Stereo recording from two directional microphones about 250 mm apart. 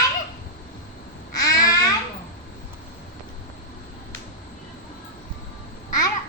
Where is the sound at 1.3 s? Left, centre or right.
Centre.